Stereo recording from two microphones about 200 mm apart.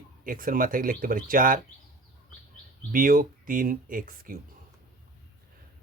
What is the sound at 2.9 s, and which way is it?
Speech, 45° right (ahead or behind).